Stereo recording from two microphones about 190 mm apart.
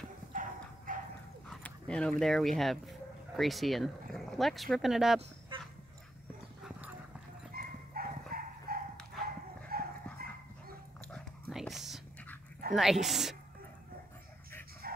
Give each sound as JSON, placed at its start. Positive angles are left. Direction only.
{"t": 0.3, "sound": "dog", "side_deg": -45}
{"t": 1.5, "sound": "speech", "side_deg": 5}
{"t": 7.5, "sound": "dog", "side_deg": -50}
{"t": 11.1, "sound": "whispering", "side_deg": 5}
{"t": 12.7, "sound": "speech", "side_deg": 0}
{"t": 14.8, "sound": "dog", "side_deg": -50}